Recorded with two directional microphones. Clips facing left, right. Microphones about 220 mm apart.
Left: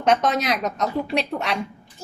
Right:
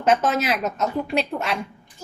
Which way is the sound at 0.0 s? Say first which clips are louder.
Even; 5° right (ahead or behind).